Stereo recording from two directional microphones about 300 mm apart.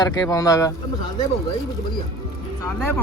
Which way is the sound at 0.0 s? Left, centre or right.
Centre.